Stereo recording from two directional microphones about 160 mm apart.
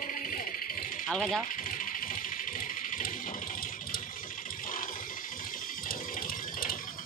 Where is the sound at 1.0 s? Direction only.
5° left (ahead or behind).